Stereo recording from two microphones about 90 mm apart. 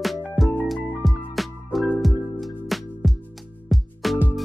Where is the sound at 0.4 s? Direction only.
Centre (ahead or behind).